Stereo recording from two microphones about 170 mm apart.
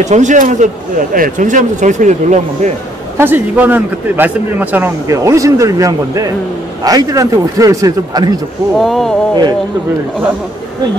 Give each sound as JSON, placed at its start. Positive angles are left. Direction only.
{"t": 0.0, "sound": "a man's voice", "side_deg": -45}
{"t": 3.2, "sound": "a man's voice", "side_deg": -10}
{"t": 8.7, "sound": "a sound", "side_deg": 0}
{"t": 9.3, "sound": "speech", "side_deg": -25}